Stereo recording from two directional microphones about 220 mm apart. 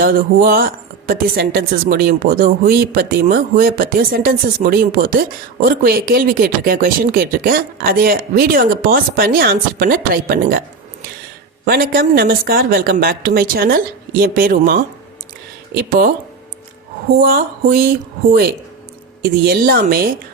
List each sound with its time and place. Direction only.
0.0 s speech: 40° right (ahead or behind)
11.6 s a man's voice: 45° right (ahead or behind)
17.2 s a man's voice: 40° right (ahead or behind)
19.2 s speech: 40° right (ahead or behind)